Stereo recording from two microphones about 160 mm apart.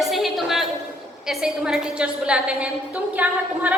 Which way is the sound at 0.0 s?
Centre (ahead or behind).